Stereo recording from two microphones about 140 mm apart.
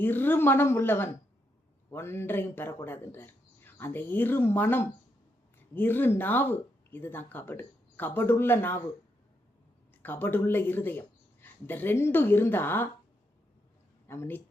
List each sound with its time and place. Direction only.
0.0 s speech: 15° left (ahead or behind)
10.0 s speech: 15° left (ahead or behind)
14.1 s speech: 15° left (ahead or behind)